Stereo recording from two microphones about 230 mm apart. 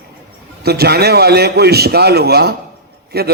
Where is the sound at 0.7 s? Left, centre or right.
Right.